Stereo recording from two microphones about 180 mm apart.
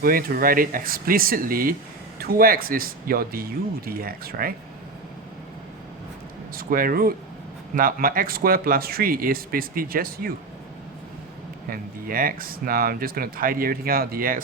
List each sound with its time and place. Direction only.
0.0 s speech: 55° right (ahead or behind)
6.5 s speech: 55° right (ahead or behind)
11.7 s speech: 50° right (ahead or behind)